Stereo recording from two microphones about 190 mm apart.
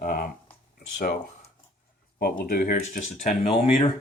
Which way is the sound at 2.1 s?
50° left (ahead or behind).